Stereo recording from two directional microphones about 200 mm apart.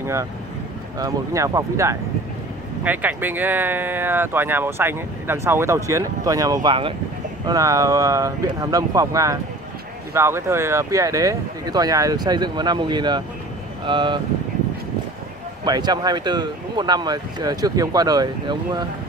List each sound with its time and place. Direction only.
0.0 s speech: 15° right (ahead or behind)
15.6 s speech: 20° right (ahead or behind)